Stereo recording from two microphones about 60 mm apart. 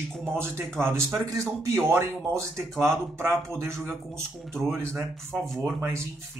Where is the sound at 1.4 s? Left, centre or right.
Right.